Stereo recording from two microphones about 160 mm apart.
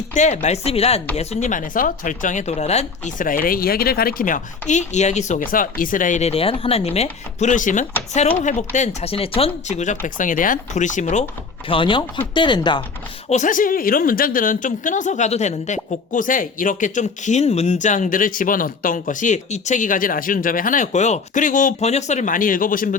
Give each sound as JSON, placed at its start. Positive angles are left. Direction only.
{"t": 0.1, "sound": "a woman's voice", "side_deg": 45}
{"t": 4.7, "sound": "speech", "side_deg": 45}
{"t": 5.4, "sound": "speech", "side_deg": 60}
{"t": 11.7, "sound": "speech", "side_deg": 30}
{"t": 13.3, "sound": "a woman's voice", "side_deg": 55}